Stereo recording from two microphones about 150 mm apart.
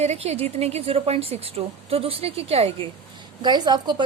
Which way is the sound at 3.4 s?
30° right (ahead or behind).